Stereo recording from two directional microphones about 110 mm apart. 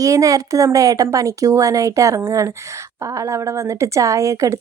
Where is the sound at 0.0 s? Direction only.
30° right (ahead or behind).